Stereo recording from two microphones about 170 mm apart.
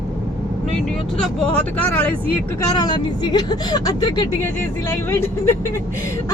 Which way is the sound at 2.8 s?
25° left (ahead or behind).